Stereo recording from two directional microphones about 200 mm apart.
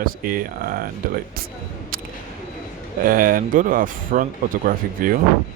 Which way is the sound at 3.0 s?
45° right (ahead or behind).